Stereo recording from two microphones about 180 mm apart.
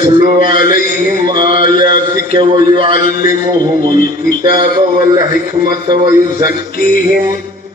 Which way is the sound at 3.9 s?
50° left (ahead or behind).